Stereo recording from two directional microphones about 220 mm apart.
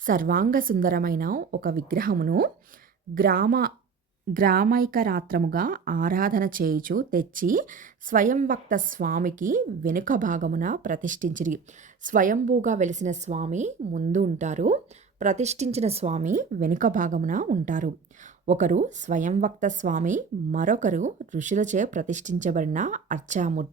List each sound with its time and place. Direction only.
0.0 s a woman's voice: 40° right (ahead or behind)